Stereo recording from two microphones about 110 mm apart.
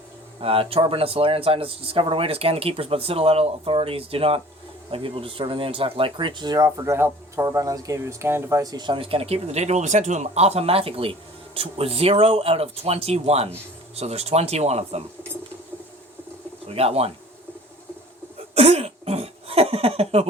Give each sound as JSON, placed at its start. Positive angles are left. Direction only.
{"t": 0.4, "sound": "speech", "side_deg": -60}
{"t": 16.6, "sound": "speech", "side_deg": -65}
{"t": 18.5, "sound": "throat clearing", "side_deg": -65}